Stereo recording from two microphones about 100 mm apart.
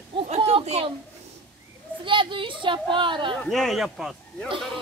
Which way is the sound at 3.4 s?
Centre (ahead or behind).